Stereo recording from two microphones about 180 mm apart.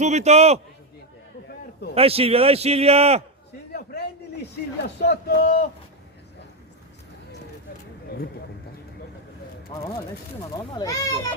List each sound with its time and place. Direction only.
0.0 s a man's voice: 40° right (ahead or behind)
2.0 s a man's voice: 35° right (ahead or behind)
3.7 s a sound: 60° left (ahead or behind)
4.9 s a man's voice: 60° left (ahead or behind)
10.5 s speech: 25° left (ahead or behind)